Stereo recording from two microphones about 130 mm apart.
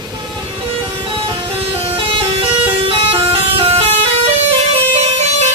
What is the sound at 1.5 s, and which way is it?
Vehicle, 45° right (ahead or behind).